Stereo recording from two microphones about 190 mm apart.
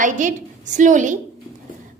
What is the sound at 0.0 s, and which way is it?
A woman's voice, 40° right (ahead or behind).